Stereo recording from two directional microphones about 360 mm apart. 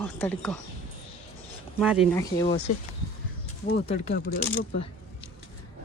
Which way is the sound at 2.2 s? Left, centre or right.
Centre.